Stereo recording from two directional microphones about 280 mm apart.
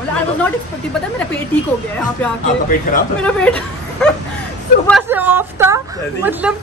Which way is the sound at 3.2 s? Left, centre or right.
Centre.